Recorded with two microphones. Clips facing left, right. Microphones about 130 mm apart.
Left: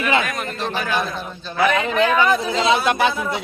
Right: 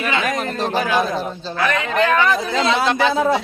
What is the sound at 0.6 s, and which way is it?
Speech, 40° right (ahead or behind).